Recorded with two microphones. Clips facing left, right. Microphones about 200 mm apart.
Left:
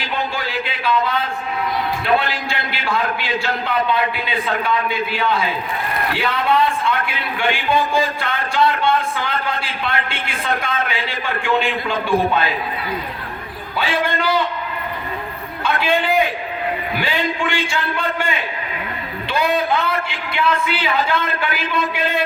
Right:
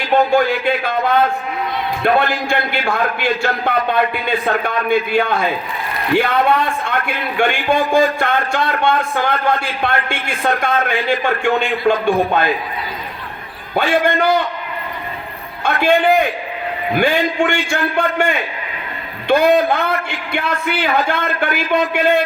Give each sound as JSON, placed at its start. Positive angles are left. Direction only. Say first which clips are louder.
{"t": 0.1, "sound": "a man's voice", "louder": "right 12 dB", "side_deg": -50}
{"t": 13.7, "sound": "a man's voice", "louder": "right 6 dB", "side_deg": -50}
{"t": 15.6, "sound": "a man's voice", "louder": "right 5 dB", "side_deg": -50}